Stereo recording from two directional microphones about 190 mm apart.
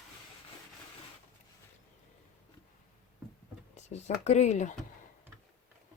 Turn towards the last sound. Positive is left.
turn(degrees=40)  # may be behind; listen again after turning